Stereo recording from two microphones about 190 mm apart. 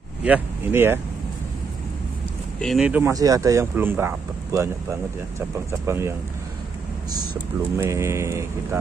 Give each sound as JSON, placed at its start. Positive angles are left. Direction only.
{"t": 0.2, "sound": "speech", "side_deg": -10}
{"t": 2.6, "sound": "speech", "side_deg": 0}
{"t": 5.7, "sound": "speech", "side_deg": -15}
{"t": 7.7, "sound": "speech", "side_deg": -15}